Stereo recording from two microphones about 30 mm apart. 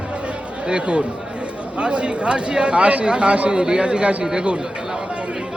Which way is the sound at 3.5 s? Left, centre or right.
Right.